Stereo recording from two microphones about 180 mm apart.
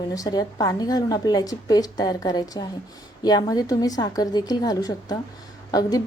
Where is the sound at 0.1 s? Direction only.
20° left (ahead or behind).